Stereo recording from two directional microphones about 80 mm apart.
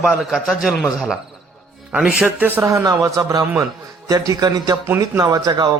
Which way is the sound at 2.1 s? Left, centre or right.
Centre.